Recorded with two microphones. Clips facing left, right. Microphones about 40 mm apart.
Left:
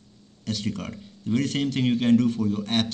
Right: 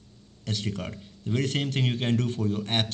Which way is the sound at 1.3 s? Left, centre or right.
Right.